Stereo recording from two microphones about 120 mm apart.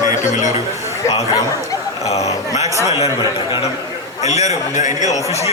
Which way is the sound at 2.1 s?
65° left (ahead or behind).